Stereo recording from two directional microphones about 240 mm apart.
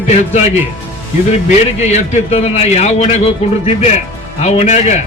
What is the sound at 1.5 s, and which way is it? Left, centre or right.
Speech, left.